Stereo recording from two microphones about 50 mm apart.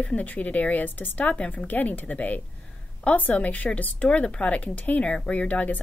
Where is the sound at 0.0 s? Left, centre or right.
Left.